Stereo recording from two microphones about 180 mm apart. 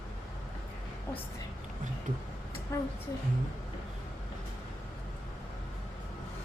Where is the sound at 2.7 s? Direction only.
15° left (ahead or behind).